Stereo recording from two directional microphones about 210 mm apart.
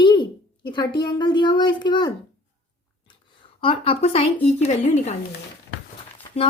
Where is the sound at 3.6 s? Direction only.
25° left (ahead or behind).